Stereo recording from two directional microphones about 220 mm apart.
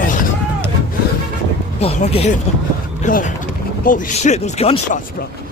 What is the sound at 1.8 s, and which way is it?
Speech, 30° left (ahead or behind).